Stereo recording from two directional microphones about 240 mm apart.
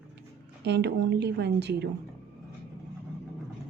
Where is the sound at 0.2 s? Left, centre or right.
Right.